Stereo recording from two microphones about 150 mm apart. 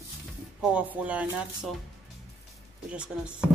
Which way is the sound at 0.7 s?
10° right (ahead or behind).